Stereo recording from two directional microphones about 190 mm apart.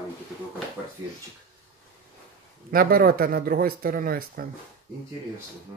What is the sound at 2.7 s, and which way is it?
Speech, 50° right (ahead or behind).